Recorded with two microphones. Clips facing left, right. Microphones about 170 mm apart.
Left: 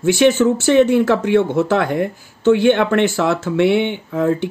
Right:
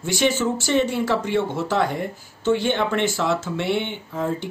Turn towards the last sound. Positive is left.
turn(degrees=65)  # may be behind; listen again after turning